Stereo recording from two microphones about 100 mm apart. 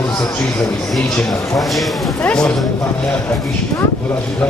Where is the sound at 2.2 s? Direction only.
10° left (ahead or behind).